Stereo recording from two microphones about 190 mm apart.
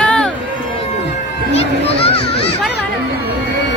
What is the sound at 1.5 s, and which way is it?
Children playing, 30° left (ahead or behind).